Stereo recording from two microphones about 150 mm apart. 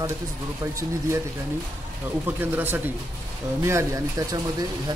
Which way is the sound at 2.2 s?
15° right (ahead or behind).